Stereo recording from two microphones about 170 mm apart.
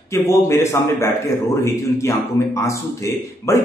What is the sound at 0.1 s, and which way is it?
A man's voice, 15° left (ahead or behind).